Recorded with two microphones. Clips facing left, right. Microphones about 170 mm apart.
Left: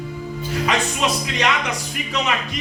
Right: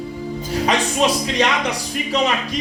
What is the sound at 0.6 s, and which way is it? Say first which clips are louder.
Speech: right 4 dB; 35° right (ahead or behind).